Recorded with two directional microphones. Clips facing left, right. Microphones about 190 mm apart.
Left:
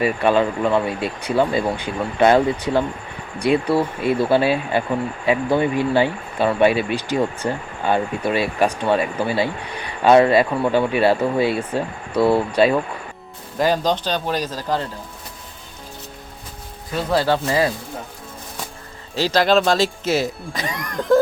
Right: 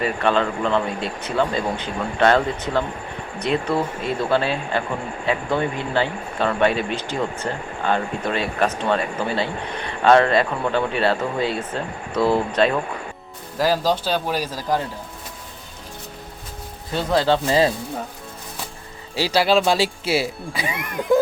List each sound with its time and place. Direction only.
0.0 s speech: 10° left (ahead or behind)
13.6 s speech: 5° right (ahead or behind)
17.0 s speech: 10° left (ahead or behind)
17.4 s speech: 25° right (ahead or behind)
19.1 s speech: 10° right (ahead or behind)